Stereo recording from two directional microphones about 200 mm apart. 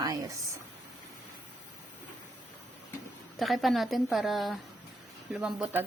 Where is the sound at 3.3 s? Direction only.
Centre (ahead or behind).